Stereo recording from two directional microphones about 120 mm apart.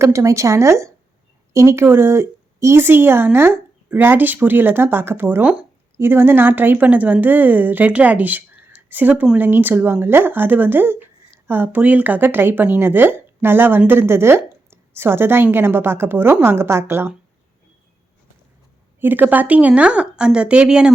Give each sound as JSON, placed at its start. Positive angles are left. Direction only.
{"t": 0.0, "sound": "speech", "side_deg": -25}
{"t": 18.9, "sound": "speech", "side_deg": -15}